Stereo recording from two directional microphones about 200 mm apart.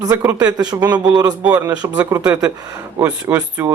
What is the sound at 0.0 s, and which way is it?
Speech, 15° right (ahead or behind).